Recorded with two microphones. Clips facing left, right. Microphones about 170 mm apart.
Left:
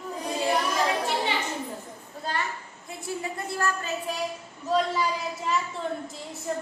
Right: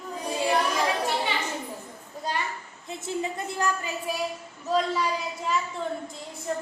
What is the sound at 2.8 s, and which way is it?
A woman's voice, 20° right (ahead or behind).